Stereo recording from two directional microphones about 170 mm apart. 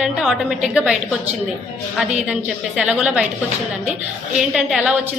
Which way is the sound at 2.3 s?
5° right (ahead or behind).